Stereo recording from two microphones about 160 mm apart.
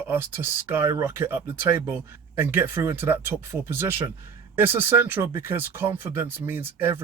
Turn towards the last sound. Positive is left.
turn(degrees=-15)  # may be behind; listen again after turning